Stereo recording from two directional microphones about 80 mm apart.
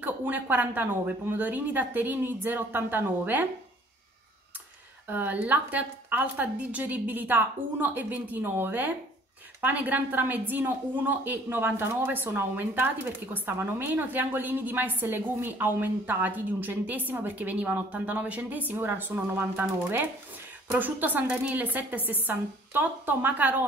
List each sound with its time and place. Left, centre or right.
0.0 s speech: right
5.0 s speech: right
20.7 s speech: right